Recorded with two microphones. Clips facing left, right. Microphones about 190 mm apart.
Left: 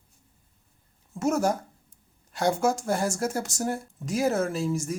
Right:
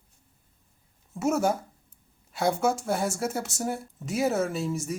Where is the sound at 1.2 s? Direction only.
5° right (ahead or behind).